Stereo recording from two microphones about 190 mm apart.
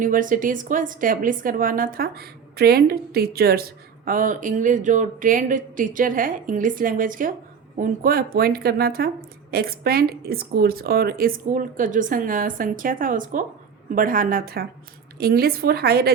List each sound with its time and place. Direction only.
0.0 s a woman's voice: 45° right (ahead or behind)